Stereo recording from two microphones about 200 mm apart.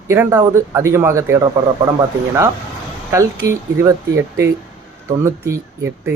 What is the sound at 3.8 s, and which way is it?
Speech, 10° right (ahead or behind).